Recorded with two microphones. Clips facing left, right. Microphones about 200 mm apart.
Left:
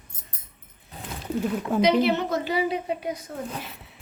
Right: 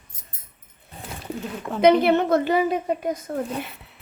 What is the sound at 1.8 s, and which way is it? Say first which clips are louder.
A woman's voice: right 5 dB; 55° right (ahead or behind).